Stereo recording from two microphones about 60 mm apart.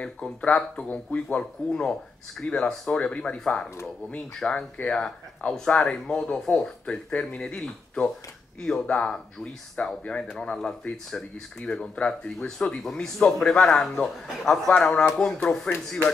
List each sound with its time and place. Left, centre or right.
0.0 s speech: centre
3.3 s a man's voice: centre